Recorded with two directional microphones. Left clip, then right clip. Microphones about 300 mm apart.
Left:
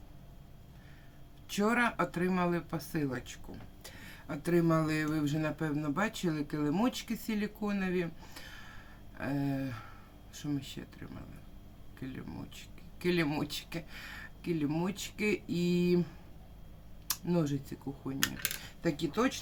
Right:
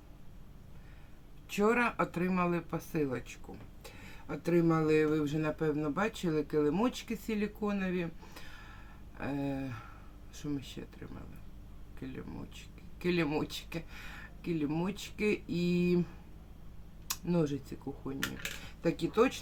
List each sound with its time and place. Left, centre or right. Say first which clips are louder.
1.5 s speech: right 1 dB; centre
17.1 s speech: even; centre